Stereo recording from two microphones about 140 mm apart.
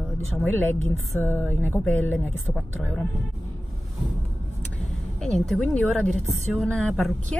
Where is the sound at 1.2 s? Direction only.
15° left (ahead or behind).